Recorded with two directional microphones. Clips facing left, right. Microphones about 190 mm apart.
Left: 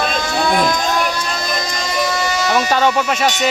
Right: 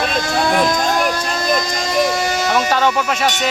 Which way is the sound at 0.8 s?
45° right (ahead or behind).